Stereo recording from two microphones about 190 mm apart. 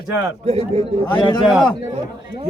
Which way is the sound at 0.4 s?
30° right (ahead or behind).